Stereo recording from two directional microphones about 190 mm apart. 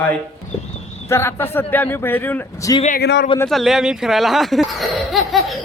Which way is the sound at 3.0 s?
65° left (ahead or behind).